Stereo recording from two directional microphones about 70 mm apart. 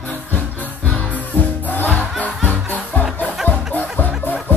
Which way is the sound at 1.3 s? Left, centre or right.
Left.